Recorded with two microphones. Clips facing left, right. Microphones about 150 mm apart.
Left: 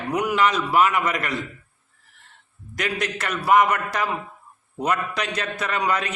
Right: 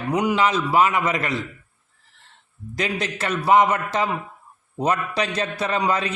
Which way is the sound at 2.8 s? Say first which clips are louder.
Right 1 dB; 25° right (ahead or behind).